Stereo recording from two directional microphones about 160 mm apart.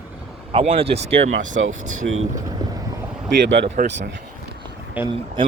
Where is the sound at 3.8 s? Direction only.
60° right (ahead or behind).